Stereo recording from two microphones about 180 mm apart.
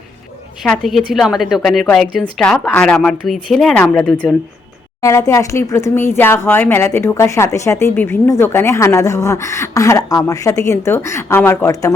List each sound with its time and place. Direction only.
0.6 s a woman's voice: centre (ahead or behind)
5.0 s speech: 15° left (ahead or behind)